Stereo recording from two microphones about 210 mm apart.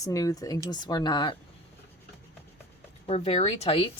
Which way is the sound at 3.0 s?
30° left (ahead or behind).